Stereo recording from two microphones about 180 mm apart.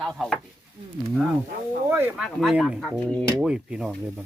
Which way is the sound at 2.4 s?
Centre (ahead or behind).